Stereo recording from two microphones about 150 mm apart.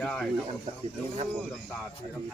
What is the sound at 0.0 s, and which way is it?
Speech, 5° left (ahead or behind).